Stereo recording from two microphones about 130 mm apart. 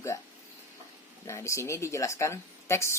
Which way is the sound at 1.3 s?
25° left (ahead or behind).